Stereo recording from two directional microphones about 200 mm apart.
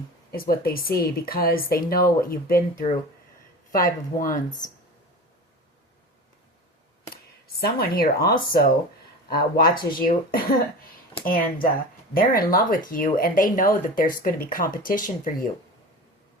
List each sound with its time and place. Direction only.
0.3 s speech: 50° left (ahead or behind)
7.1 s speech: 50° left (ahead or behind)